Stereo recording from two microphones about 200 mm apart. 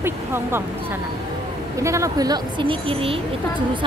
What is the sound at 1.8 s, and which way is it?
Speech, 15° right (ahead or behind).